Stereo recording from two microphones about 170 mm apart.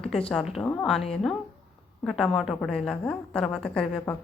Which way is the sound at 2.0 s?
Centre (ahead or behind).